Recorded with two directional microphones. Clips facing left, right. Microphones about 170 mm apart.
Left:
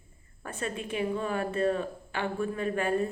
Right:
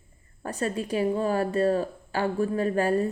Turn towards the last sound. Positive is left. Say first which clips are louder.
# right 4 dB
turn(degrees=-35)  # may be behind; listen again after turning